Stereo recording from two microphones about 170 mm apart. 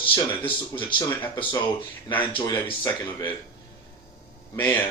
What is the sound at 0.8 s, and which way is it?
Speech, 30° left (ahead or behind).